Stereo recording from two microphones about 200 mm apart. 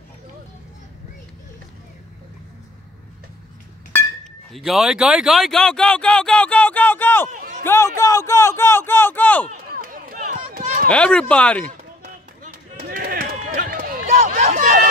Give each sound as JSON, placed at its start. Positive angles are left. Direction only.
{"t": 3.9, "sound": "speech", "side_deg": 0}
{"t": 7.2, "sound": "a sound", "side_deg": -40}
{"t": 7.6, "sound": "a man's voice", "side_deg": 15}
{"t": 9.5, "sound": "a sound", "side_deg": -45}
{"t": 10.9, "sound": "speech", "side_deg": 5}
{"t": 12.8, "sound": "run", "side_deg": -45}